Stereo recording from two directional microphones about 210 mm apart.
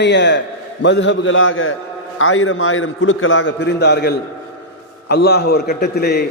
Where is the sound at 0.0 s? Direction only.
55° left (ahead or behind).